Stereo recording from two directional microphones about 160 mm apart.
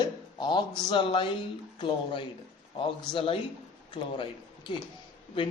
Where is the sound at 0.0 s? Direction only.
25° left (ahead or behind).